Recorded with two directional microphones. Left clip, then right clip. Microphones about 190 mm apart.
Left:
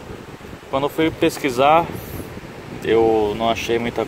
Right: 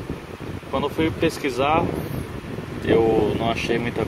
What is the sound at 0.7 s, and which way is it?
Speech, 30° left (ahead or behind).